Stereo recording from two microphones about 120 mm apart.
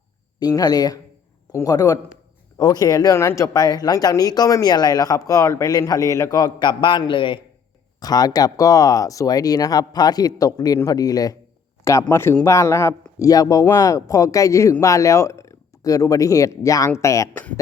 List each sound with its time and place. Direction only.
0.3 s speech: 35° left (ahead or behind)
7.9 s speech: 35° left (ahead or behind)
12.1 s speech: 20° left (ahead or behind)